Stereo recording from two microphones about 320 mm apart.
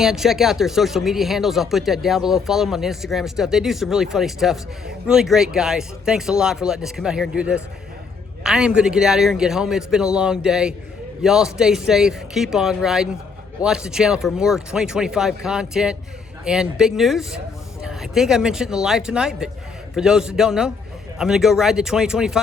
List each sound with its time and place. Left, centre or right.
0.0 s speech: centre